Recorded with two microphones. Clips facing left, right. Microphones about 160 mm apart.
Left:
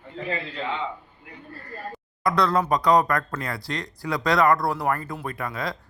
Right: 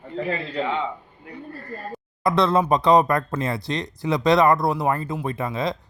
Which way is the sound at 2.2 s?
25° right (ahead or behind).